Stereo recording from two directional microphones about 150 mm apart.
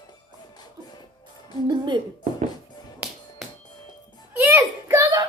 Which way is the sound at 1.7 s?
30° right (ahead or behind).